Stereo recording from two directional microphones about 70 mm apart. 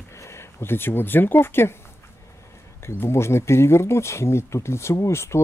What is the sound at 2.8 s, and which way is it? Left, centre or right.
Speech, left.